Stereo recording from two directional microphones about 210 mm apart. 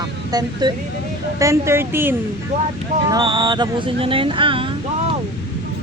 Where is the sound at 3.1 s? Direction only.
20° right (ahead or behind).